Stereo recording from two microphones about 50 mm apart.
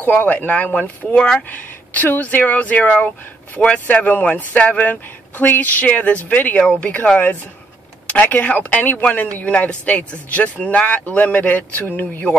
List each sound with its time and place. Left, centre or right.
0.0 s speech: left
1.5 s speech: left
3.8 s speech: left
8.1 s speech: left